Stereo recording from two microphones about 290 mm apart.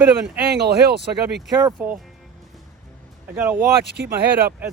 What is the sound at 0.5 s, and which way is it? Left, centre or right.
Speech, right.